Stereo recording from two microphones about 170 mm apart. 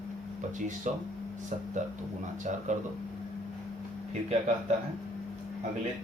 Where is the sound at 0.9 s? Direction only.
45° right (ahead or behind).